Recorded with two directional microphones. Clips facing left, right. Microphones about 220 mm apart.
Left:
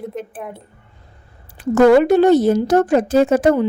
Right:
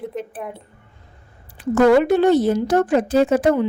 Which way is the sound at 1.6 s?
40° left (ahead or behind).